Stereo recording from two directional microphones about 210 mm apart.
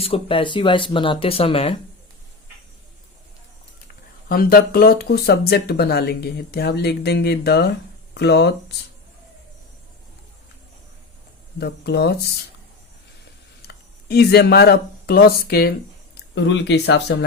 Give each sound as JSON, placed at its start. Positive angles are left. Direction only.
{"t": 0.0, "sound": "speech", "side_deg": 25}
{"t": 4.3, "sound": "speech", "side_deg": 45}
{"t": 11.6, "sound": "speech", "side_deg": 50}
{"t": 13.7, "sound": "speech", "side_deg": 50}